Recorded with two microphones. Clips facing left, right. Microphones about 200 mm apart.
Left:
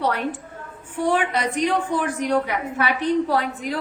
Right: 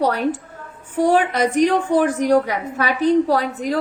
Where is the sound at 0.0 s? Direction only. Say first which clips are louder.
Right 5 dB; 40° right (ahead or behind).